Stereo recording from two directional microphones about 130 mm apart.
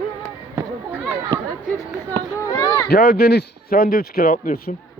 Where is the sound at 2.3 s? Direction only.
25° left (ahead or behind).